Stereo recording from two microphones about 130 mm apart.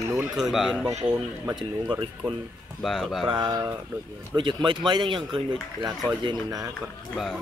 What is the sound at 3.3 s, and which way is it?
A man's voice, 35° right (ahead or behind).